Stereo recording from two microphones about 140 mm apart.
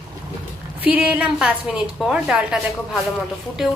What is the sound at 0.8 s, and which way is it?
A woman's voice, 10° right (ahead or behind).